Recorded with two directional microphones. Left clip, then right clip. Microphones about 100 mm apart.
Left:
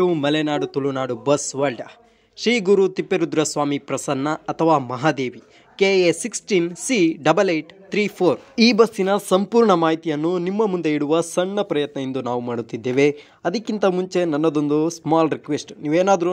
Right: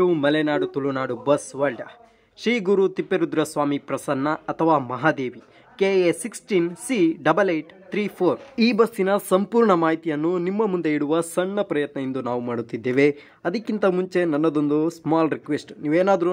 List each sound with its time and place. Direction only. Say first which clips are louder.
0.0 s speech: even; 35° left (ahead or behind)
2.4 s speech: left 3 dB; 25° left (ahead or behind)
8.7 s speech: left 3 dB; 30° left (ahead or behind)
10.2 s speech: left 2 dB; 15° left (ahead or behind)